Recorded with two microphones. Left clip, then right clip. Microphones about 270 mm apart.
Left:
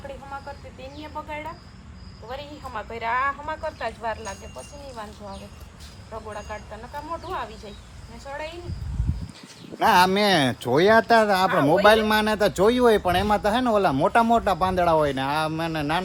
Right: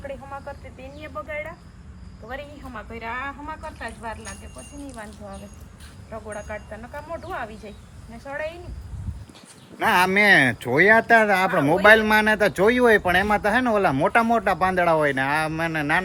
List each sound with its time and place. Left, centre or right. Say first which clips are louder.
2.3 s speech: left 2 dB; left
6.3 s speech: right 1 dB; centre
9.7 s speech: left 1 dB; centre